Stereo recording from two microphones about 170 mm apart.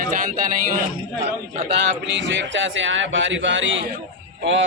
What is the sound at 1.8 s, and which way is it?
A man's voice, 90° right.